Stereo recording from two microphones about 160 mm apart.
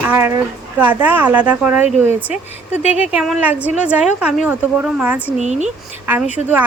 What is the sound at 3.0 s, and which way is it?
A woman's voice, 5° right (ahead or behind).